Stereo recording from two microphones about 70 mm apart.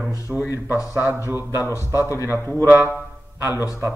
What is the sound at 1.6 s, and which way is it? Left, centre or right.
Speech, left.